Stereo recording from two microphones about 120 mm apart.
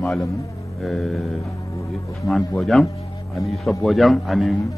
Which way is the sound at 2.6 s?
Centre (ahead or behind).